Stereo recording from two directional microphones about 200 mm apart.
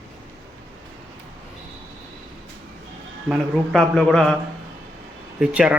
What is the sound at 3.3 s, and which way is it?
Speech, centre (ahead or behind).